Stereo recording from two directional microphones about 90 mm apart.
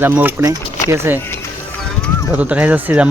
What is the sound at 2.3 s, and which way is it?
Speech, 15° right (ahead or behind).